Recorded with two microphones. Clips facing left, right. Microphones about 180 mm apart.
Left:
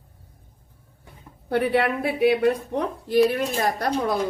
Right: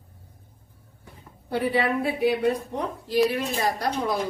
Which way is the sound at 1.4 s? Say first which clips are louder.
Left 3 dB; 65° left (ahead or behind).